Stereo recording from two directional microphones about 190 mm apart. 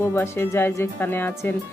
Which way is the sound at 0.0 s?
15° left (ahead or behind).